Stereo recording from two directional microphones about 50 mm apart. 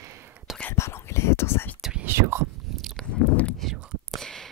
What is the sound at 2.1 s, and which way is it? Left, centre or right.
Whispering, right.